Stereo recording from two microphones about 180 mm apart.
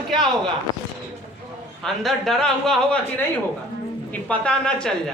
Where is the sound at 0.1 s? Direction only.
25° right (ahead or behind).